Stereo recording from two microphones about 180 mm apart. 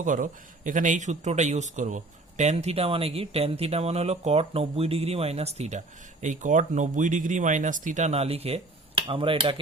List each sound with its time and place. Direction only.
0.0 s speech: 45° right (ahead or behind); by 9.6 s 30° right (ahead or behind)